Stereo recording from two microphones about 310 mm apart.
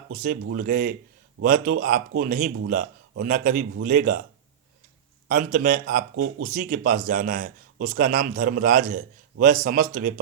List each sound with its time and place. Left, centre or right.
0.1 s a man's voice: right
5.3 s a man's voice: right